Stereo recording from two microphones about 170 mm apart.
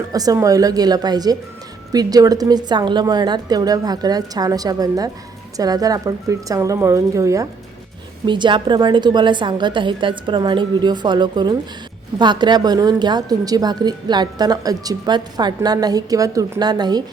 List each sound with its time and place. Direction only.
0.1 s a woman's voice: 20° right (ahead or behind)